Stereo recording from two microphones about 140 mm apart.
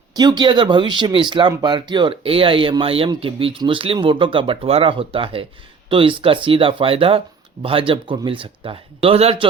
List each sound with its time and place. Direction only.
0.2 s speech: 30° right (ahead or behind)